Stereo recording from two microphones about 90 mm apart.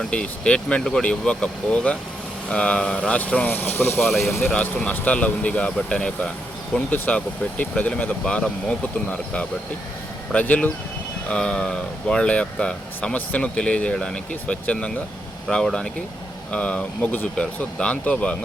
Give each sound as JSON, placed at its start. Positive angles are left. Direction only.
{"t": 0.0, "sound": "speech", "side_deg": 10}
{"t": 4.0, "sound": "speech", "side_deg": 0}
{"t": 4.5, "sound": "speech", "side_deg": 15}
{"t": 10.3, "sound": "speech", "side_deg": 15}